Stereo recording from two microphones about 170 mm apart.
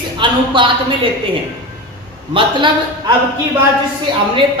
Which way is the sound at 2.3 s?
30° right (ahead or behind).